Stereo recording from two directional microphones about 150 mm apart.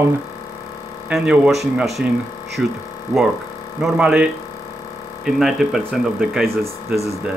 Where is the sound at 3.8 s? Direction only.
5° right (ahead or behind).